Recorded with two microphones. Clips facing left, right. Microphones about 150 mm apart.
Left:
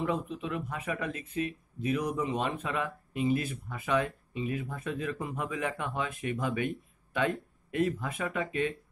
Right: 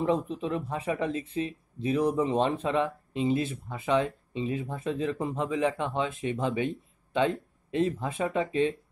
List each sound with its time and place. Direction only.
0.0 s speech: 30° right (ahead or behind)